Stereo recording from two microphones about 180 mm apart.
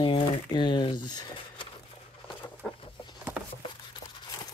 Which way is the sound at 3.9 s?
25° left (ahead or behind).